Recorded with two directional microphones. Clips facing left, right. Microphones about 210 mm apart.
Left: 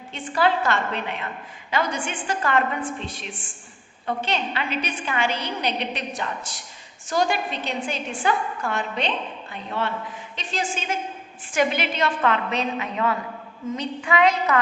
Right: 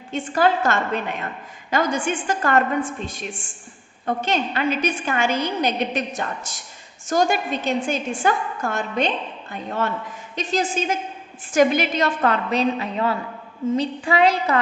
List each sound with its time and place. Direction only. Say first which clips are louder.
0.1 s a woman's voice: right 3 dB; 45° right (ahead or behind)
4.0 s a woman's voice: right 3 dB; 45° right (ahead or behind)